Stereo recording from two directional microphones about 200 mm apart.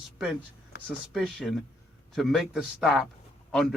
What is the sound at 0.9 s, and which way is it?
Speech, 5° left (ahead or behind).